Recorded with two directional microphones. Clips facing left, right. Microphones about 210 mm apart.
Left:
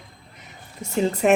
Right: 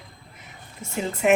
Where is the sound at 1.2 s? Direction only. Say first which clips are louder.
Left 1 dB; 35° left (ahead or behind).